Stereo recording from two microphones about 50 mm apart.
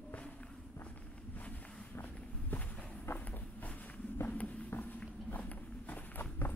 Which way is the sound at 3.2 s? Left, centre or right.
Left.